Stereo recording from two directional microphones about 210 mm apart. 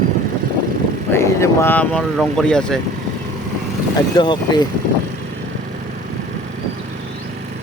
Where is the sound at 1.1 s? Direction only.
15° left (ahead or behind).